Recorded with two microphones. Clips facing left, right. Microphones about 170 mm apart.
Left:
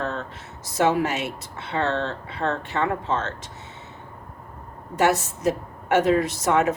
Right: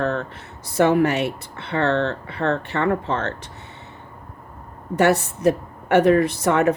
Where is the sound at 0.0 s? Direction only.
60° right (ahead or behind).